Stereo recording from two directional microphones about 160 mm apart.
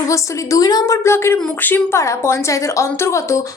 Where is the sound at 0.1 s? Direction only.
20° left (ahead or behind).